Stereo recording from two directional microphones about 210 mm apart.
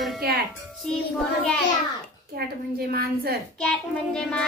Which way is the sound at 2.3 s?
45° right (ahead or behind).